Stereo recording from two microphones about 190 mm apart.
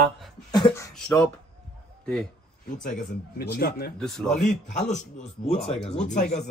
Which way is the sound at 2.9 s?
40° left (ahead or behind).